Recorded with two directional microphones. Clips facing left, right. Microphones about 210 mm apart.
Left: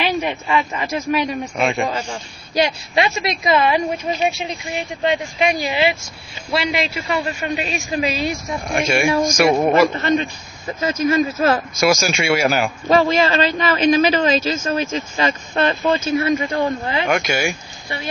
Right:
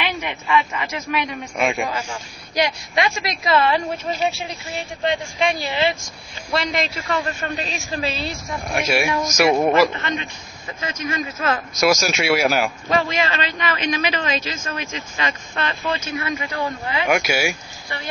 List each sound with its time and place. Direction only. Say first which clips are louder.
0.0 s a man's voice: left 6 dB; 30° left (ahead or behind)
1.6 s speech: left 1 dB; 5° right (ahead or behind)
1.9 s a man's voice: left 3 dB; 30° left (ahead or behind)
8.6 s speech: left 3 dB; 5° right (ahead or behind)
9.9 s a man's voice: left 8 dB; 40° left (ahead or behind)
11.8 s speech: even; centre (ahead or behind)
12.9 s a man's voice: left 7 dB; 35° left (ahead or behind)
17.0 s speech: right 1 dB; 5° right (ahead or behind)